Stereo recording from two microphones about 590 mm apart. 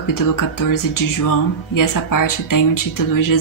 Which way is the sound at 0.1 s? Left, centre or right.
Left.